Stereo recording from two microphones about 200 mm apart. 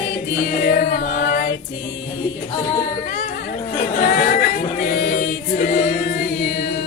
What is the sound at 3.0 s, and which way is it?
Music, 45° left (ahead or behind).